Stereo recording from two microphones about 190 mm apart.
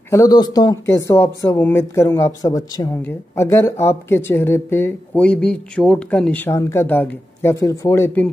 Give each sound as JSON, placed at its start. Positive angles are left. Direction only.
{"t": 0.1, "sound": "speech", "side_deg": 20}